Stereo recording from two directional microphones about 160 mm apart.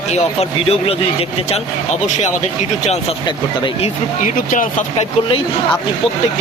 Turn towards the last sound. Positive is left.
turn(degrees=55)  # may be behind; listen again after turning